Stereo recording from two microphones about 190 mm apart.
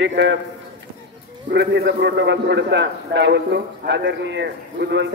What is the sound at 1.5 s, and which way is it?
A man's voice, 65° right (ahead or behind).